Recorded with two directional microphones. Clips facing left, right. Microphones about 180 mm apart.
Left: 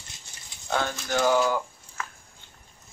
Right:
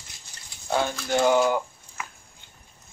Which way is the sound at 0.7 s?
15° right (ahead or behind).